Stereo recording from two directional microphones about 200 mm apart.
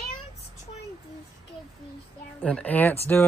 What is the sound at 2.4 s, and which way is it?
Speech, 5° left (ahead or behind).